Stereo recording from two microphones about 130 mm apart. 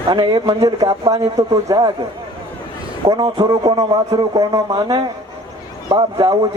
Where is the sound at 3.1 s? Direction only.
30° right (ahead or behind).